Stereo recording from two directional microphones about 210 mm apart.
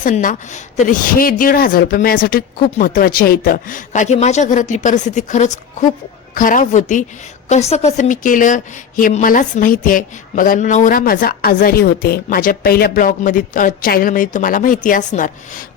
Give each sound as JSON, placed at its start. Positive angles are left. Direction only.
{"t": 0.0, "sound": "a woman's voice", "side_deg": 40}